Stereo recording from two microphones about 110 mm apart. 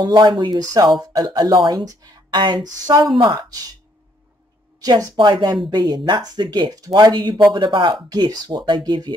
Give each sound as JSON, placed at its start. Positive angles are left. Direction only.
{"t": 0.0, "sound": "speech", "side_deg": -40}
{"t": 3.2, "sound": "speech", "side_deg": -45}
{"t": 3.4, "sound": "speech", "side_deg": -35}
{"t": 4.7, "sound": "speech", "side_deg": -35}